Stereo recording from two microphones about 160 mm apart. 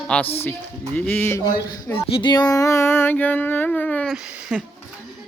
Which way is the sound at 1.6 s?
25° left (ahead or behind).